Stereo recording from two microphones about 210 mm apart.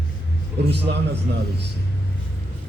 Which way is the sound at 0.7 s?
55° right (ahead or behind).